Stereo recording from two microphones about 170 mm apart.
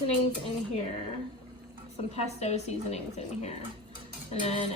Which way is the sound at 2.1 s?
40° left (ahead or behind).